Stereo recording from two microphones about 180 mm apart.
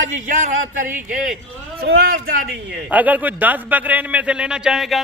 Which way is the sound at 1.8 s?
55° right (ahead or behind).